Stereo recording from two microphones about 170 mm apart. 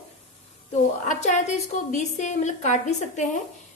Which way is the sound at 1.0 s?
45° left (ahead or behind).